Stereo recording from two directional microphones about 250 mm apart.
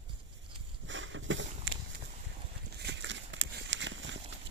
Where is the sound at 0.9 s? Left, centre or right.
Right.